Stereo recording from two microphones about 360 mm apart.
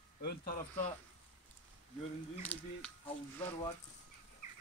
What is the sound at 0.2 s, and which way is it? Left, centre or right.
Speech, left.